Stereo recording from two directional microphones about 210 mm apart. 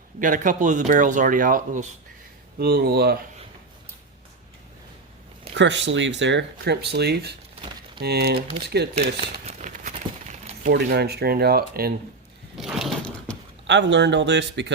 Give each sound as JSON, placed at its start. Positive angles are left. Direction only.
{"t": 0.2, "sound": "speech", "side_deg": -40}
{"t": 5.5, "sound": "speech", "side_deg": -55}
{"t": 9.0, "sound": "a sound", "side_deg": -30}
{"t": 10.7, "sound": "speech", "side_deg": -50}
{"t": 12.5, "sound": "a sound", "side_deg": 0}
{"t": 13.7, "sound": "speech", "side_deg": -55}